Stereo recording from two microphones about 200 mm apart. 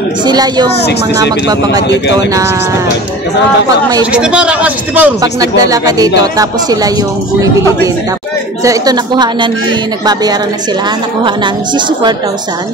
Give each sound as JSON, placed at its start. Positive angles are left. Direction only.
{"t": 0.3, "sound": "a woman's voice", "side_deg": -20}
{"t": 4.1, "sound": "a man's voice", "side_deg": -5}
{"t": 5.2, "sound": "speech", "side_deg": -15}
{"t": 8.6, "sound": "a woman's voice", "side_deg": -20}